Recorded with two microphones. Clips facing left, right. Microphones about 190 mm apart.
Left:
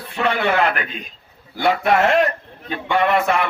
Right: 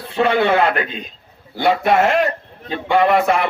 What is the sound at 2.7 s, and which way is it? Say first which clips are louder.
Speech: right 3 dB; 30° right (ahead or behind).